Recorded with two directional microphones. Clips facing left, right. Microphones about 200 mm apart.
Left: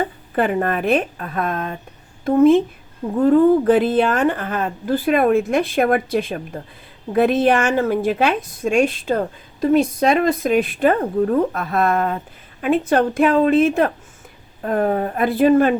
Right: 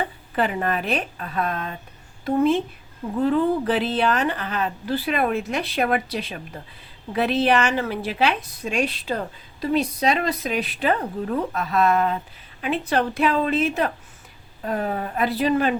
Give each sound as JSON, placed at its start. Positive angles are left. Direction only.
{"t": 0.3, "sound": "a woman's voice", "side_deg": 50}